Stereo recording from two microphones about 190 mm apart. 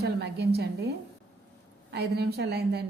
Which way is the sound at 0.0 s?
60° right (ahead or behind).